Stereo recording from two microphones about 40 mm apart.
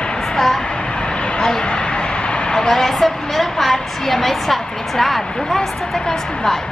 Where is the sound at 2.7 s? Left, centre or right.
Centre.